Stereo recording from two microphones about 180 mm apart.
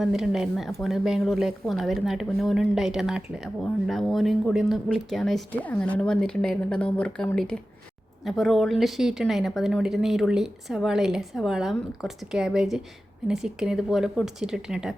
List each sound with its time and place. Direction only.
0.0 s a woman's voice: centre (ahead or behind)